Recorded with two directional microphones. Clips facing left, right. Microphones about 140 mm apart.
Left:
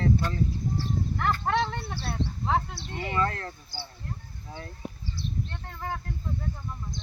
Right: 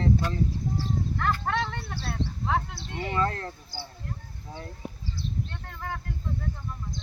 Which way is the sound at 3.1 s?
25° right (ahead or behind).